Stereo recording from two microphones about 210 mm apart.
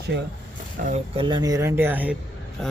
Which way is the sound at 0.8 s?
40° right (ahead or behind).